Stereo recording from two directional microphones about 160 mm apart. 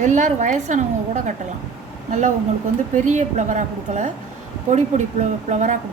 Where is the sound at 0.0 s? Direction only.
50° right (ahead or behind).